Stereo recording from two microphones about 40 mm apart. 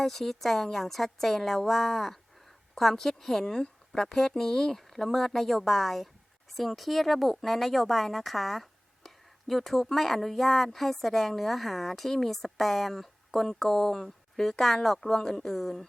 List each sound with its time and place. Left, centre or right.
0.0 s speech: centre